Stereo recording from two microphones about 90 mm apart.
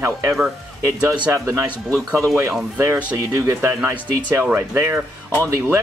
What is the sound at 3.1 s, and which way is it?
Speech, 35° right (ahead or behind).